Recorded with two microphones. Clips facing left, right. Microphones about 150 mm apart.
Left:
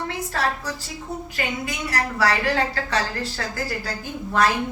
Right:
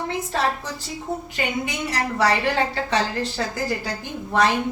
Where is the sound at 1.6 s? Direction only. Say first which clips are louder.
Right 1 dB; 20° right (ahead or behind).